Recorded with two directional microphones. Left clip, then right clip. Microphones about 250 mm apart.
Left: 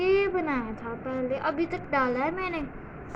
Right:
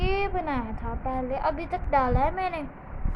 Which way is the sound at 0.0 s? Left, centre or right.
Centre.